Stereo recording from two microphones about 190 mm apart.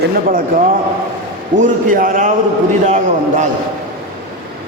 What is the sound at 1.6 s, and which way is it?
A man's voice, 45° right (ahead or behind).